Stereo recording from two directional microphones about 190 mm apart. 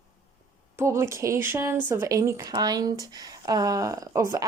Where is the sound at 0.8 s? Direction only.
15° right (ahead or behind).